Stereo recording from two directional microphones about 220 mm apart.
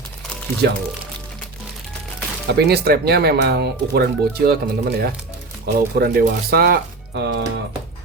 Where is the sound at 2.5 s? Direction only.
45° right (ahead or behind).